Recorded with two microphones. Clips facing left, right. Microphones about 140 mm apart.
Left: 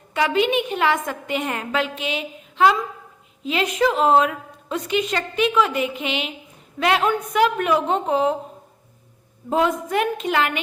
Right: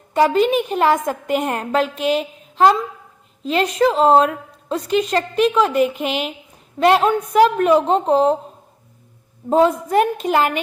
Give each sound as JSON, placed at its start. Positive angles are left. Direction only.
{"t": 0.1, "sound": "a woman's voice", "side_deg": -40}
{"t": 2.0, "sound": "a sound", "side_deg": -40}
{"t": 3.5, "sound": "a woman's voice", "side_deg": -35}
{"t": 6.0, "sound": "a woman's voice", "side_deg": 0}
{"t": 6.7, "sound": "a woman's voice", "side_deg": -40}
{"t": 9.5, "sound": "a woman's voice", "side_deg": -35}